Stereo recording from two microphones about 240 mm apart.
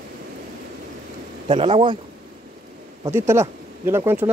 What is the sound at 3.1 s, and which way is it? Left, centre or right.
Speech, centre.